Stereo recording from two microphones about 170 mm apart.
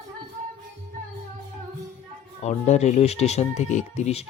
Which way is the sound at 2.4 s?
45° left (ahead or behind).